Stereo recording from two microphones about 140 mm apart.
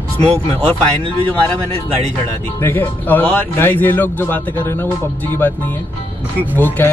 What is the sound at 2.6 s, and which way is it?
A man's voice, 15° left (ahead or behind).